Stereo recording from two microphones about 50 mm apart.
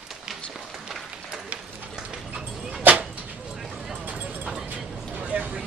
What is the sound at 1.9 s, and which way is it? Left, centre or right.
Dog, centre.